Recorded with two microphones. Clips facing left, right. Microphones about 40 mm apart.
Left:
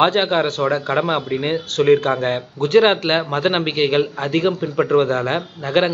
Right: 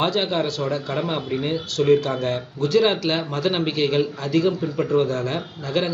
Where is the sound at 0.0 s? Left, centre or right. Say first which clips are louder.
Left 6 dB; left.